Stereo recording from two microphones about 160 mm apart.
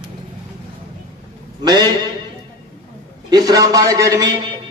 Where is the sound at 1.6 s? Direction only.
25° right (ahead or behind).